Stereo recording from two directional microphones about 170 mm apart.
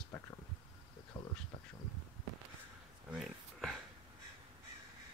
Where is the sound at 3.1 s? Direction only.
Centre (ahead or behind).